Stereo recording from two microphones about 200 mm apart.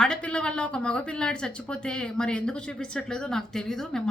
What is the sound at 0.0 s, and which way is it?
Speech, 5° left (ahead or behind).